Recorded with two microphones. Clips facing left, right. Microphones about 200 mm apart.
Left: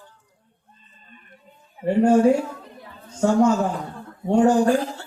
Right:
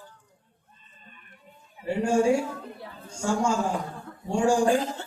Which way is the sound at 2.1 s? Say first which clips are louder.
Left 5 dB; 10° right (ahead or behind).